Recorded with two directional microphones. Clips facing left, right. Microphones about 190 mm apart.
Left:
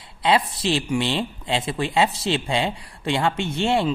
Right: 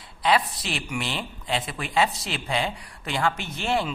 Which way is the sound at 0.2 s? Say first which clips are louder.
Left 3 dB; 25° left (ahead or behind).